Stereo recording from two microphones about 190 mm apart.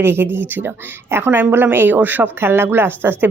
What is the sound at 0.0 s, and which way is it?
A woman's voice, 10° right (ahead or behind).